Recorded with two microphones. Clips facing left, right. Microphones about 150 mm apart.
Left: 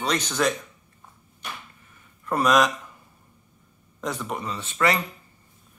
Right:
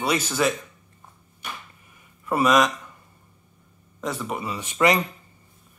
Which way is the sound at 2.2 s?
5° right (ahead or behind).